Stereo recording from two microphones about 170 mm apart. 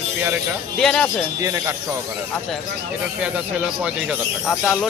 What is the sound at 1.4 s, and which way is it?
Speech, 20° right (ahead or behind).